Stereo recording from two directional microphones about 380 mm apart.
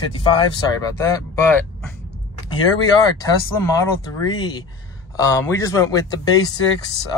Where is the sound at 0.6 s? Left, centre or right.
Centre.